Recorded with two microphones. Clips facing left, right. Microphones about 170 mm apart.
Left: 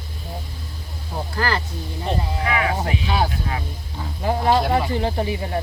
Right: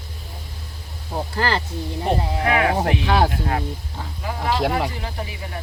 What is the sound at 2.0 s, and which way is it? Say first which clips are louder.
Speech: right 3 dB; 55° right (ahead or behind).